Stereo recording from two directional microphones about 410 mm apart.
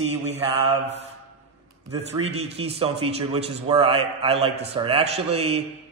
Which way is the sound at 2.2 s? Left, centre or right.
Centre.